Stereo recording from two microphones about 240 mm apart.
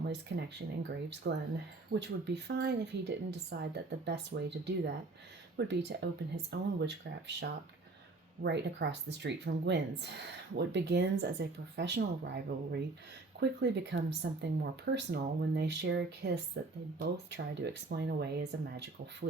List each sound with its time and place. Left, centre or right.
0.1 s speech: right